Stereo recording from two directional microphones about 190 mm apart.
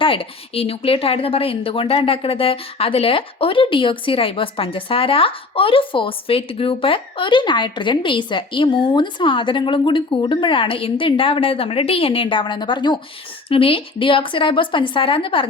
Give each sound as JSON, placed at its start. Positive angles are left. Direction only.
{"t": 0.0, "sound": "a woman's voice", "side_deg": 30}